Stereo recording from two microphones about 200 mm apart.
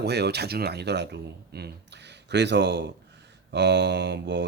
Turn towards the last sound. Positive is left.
turn(degrees=-60)  # may be behind; listen again after turning